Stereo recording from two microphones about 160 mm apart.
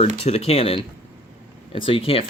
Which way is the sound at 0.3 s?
40° left (ahead or behind).